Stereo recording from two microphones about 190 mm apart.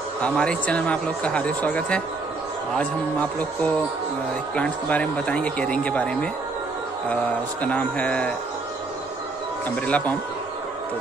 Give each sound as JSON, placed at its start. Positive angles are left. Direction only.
{"t": 0.2, "sound": "speech", "side_deg": 5}
{"t": 7.6, "sound": "speech", "side_deg": 5}
{"t": 9.8, "sound": "speech", "side_deg": 5}